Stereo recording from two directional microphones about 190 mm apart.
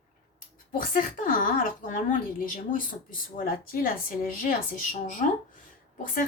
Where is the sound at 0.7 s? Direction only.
45° left (ahead or behind).